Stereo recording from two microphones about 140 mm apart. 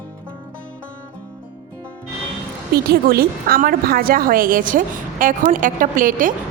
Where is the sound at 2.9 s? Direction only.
90° right; by 6.3 s 70° right (ahead or behind).